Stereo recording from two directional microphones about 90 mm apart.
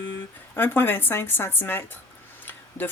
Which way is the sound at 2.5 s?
20° left (ahead or behind).